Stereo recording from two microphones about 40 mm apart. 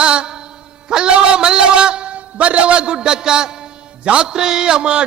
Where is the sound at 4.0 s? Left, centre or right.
Right.